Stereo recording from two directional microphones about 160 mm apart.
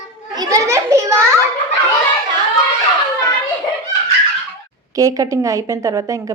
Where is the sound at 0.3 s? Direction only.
20° right (ahead or behind).